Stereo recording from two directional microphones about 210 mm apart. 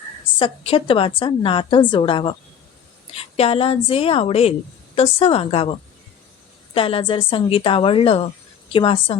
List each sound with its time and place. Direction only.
0.3 s a woman's voice: 25° left (ahead or behind)
6.7 s a woman's voice: 25° left (ahead or behind)